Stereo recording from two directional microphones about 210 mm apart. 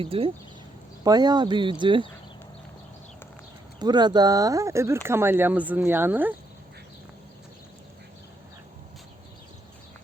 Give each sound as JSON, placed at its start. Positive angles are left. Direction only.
{"t": 0.0, "sound": "speech", "side_deg": -25}
{"t": 3.8, "sound": "speech", "side_deg": -20}